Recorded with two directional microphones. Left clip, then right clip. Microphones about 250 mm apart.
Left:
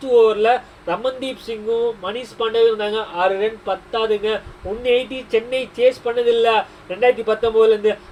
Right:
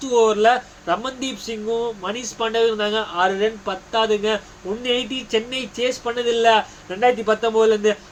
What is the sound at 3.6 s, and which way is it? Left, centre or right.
Speech, centre.